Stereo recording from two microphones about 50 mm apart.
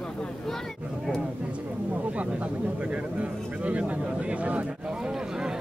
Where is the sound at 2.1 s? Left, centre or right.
Right.